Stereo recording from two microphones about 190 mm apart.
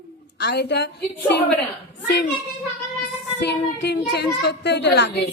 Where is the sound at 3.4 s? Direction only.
60° left (ahead or behind).